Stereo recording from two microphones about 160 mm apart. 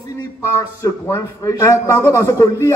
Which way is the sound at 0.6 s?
20° left (ahead or behind).